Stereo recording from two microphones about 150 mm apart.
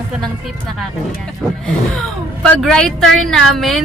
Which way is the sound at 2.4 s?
5° left (ahead or behind).